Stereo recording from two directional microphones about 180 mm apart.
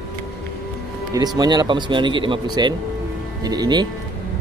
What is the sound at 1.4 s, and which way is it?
Speech, 25° right (ahead or behind).